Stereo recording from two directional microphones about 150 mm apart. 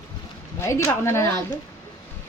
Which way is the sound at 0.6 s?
20° left (ahead or behind).